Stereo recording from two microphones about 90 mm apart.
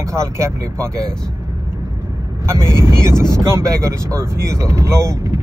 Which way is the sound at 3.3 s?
35° right (ahead or behind).